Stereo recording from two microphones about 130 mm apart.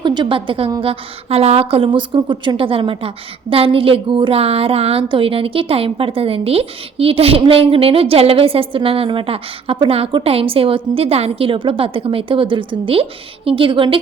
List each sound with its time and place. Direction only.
0.0 s a woman's voice: 35° right (ahead or behind)